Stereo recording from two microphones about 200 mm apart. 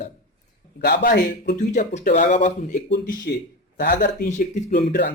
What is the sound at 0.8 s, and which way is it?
Speech, 50° left (ahead or behind).